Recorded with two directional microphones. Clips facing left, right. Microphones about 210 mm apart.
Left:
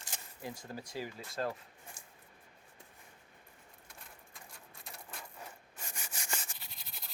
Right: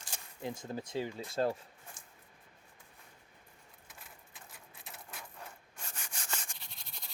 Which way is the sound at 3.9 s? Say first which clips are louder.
Even; centre (ahead or behind).